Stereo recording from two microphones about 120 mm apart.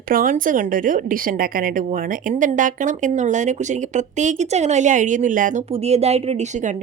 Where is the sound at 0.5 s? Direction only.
90° right.